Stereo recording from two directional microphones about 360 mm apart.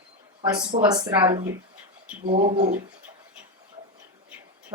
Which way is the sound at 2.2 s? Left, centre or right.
Right.